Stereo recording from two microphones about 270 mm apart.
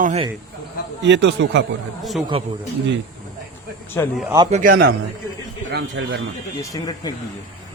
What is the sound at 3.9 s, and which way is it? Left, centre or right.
Speech, centre.